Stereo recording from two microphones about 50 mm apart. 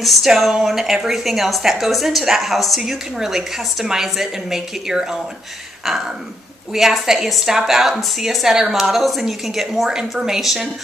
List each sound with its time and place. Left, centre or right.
0.0 s a woman's voice: centre